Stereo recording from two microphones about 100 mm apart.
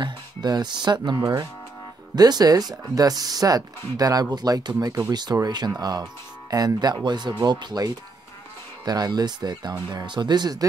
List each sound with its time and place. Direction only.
0.0 s speech: 45° right (ahead or behind)